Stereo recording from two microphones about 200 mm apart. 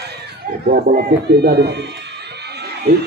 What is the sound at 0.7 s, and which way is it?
Speech, 50° right (ahead or behind).